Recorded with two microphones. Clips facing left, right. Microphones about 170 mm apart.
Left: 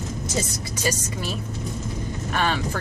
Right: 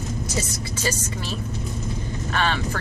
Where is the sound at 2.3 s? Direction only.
15° left (ahead or behind).